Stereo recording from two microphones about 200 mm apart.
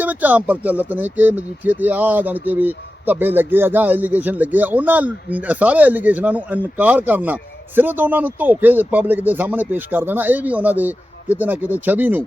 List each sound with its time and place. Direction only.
0.0 s speech: 10° right (ahead or behind)